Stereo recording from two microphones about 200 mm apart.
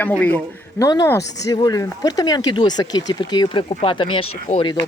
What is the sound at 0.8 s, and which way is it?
Speech, 15° left (ahead or behind).